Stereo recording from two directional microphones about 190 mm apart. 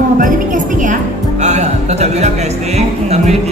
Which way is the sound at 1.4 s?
35° right (ahead or behind).